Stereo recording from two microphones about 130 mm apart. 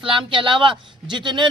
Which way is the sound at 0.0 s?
40° right (ahead or behind).